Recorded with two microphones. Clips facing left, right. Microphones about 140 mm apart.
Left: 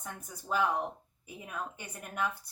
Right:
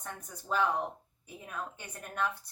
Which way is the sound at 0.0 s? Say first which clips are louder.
Even; 10° left (ahead or behind).